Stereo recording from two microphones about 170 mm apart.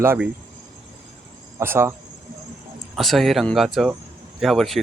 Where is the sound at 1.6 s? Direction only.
15° right (ahead or behind).